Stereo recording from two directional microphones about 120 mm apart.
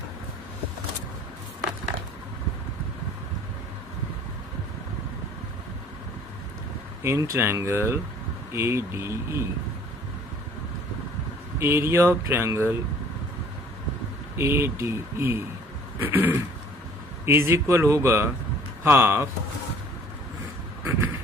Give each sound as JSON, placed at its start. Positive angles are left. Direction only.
{"t": 7.0, "sound": "speech", "side_deg": -25}
{"t": 11.6, "sound": "speech", "side_deg": -25}
{"t": 14.3, "sound": "speech", "side_deg": -20}